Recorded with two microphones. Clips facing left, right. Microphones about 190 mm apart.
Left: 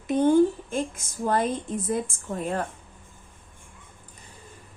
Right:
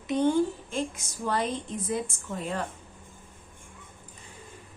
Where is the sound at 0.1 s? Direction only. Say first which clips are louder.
Left 5 dB; 50° left (ahead or behind).